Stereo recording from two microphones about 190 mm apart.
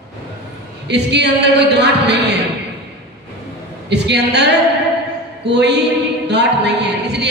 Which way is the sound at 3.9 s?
65° right (ahead or behind).